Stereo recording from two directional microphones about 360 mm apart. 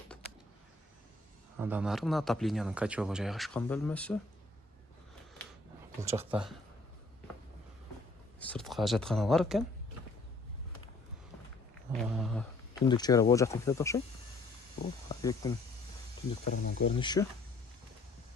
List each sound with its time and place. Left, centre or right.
1.5 s speech: centre
6.0 s speech: centre
8.4 s speech: centre
11.9 s speech: centre
15.1 s speech: centre
16.5 s speech: left